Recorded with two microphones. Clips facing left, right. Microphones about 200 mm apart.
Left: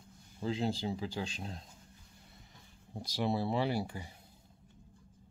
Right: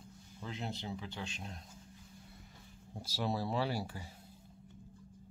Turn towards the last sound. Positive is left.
turn(degrees=15)  # may be behind; listen again after turning